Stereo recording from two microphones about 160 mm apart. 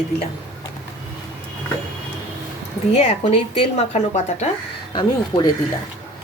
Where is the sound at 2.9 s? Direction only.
45° left (ahead or behind).